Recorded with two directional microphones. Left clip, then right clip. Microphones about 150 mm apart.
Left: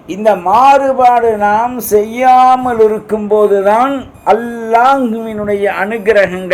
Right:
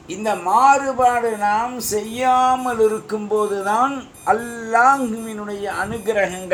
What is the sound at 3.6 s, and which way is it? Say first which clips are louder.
Speech: left 9 dB; 80° left.